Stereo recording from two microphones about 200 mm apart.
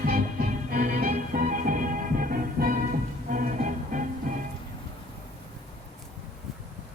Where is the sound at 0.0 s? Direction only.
50° right (ahead or behind).